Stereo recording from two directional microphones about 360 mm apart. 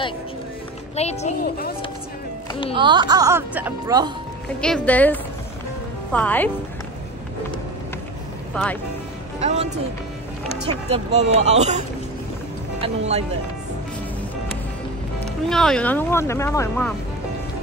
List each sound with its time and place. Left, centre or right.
0.9 s a child's voice: centre
2.7 s speech: centre
4.6 s speech: centre
9.4 s speech: centre
10.9 s speech: centre
12.8 s speech: centre
15.2 s speech: centre